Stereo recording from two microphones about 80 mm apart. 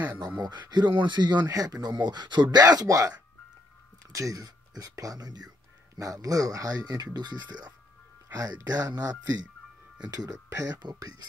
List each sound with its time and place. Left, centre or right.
0.4 s speech: right
1.5 s speech: right
2.6 s speech: right
8.3 s speech: right